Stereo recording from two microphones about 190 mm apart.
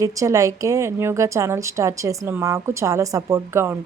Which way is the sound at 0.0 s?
15° right (ahead or behind).